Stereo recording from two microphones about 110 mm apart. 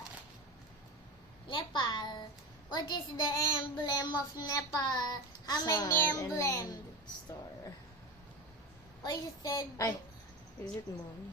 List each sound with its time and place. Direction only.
1.5 s a sound: 45° left (ahead or behind)
2.6 s a child's voice: 40° left (ahead or behind)
9.0 s a child's voice: 35° left (ahead or behind)